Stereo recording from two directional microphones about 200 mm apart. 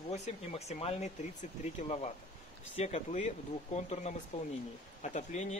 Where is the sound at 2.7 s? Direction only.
35° left (ahead or behind).